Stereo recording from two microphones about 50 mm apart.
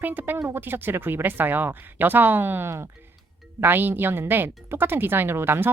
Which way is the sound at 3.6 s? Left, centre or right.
Right.